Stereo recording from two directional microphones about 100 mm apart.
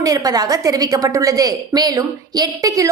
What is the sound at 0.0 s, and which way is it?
A woman's voice, 40° right (ahead or behind).